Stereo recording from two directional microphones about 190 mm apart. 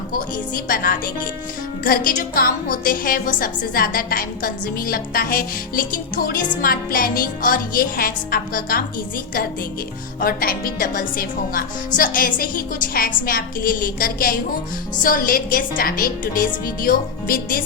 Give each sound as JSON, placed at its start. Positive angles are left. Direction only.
{"t": 0.7, "sound": "a woman's voice", "side_deg": 50}
{"t": 10.2, "sound": "a woman's voice", "side_deg": 50}